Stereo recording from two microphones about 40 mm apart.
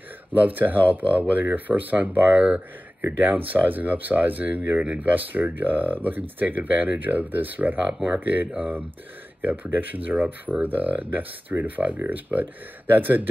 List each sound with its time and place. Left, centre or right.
0.3 s speech: right